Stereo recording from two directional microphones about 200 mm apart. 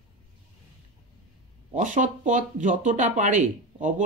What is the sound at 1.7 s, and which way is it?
Speech, 40° right (ahead or behind).